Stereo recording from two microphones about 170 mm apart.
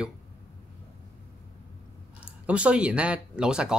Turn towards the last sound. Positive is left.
turn(degrees=-5)  # may be behind; listen again after turning